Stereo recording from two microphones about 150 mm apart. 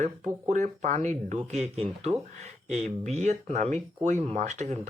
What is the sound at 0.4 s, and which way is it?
Speech, 55° right (ahead or behind).